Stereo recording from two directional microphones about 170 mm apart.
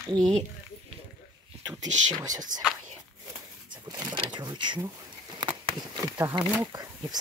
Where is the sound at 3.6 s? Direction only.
20° right (ahead or behind).